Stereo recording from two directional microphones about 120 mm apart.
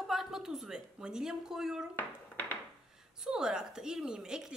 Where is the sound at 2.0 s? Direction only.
15° left (ahead or behind).